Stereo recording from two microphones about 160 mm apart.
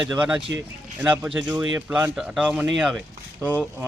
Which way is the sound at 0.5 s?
20° right (ahead or behind).